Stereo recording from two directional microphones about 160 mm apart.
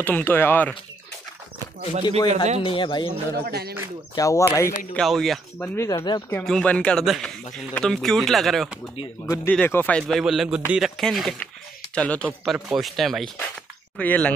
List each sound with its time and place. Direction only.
0.0 s speech: 10° left (ahead or behind)
2.0 s speech: 30° left (ahead or behind)
3.4 s speech: 80° right
4.1 s speech: 20° left (ahead or behind)
4.9 s speech: centre (ahead or behind)
5.6 s speech: 15° left (ahead or behind)
6.3 s speech: 5° left (ahead or behind)
12.4 s speech: 5° right (ahead or behind)